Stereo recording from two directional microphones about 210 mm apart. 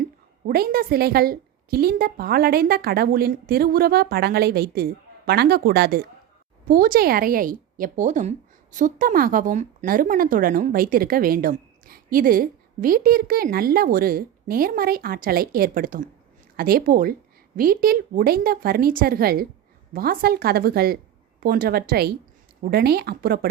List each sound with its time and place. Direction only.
0.4 s a woman's voice: 45° right (ahead or behind)